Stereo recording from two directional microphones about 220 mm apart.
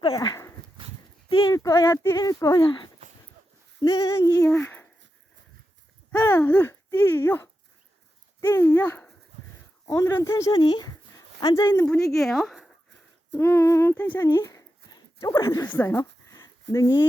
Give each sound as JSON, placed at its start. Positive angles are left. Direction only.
{"t": 0.0, "sound": "dog", "side_deg": 20}
{"t": 1.3, "sound": "speech", "side_deg": 20}
{"t": 6.1, "sound": "speech", "side_deg": 10}
{"t": 12.1, "sound": "speech", "side_deg": 0}
{"t": 14.8, "sound": "a sound", "side_deg": 20}
{"t": 16.7, "sound": "speech", "side_deg": 15}